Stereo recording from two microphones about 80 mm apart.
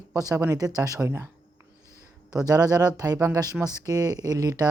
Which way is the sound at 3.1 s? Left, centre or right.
Right.